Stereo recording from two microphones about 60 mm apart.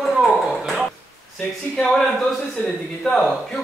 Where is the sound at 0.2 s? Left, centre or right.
Centre.